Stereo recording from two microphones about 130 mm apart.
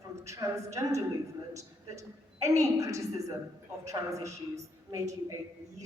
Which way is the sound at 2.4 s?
25° right (ahead or behind).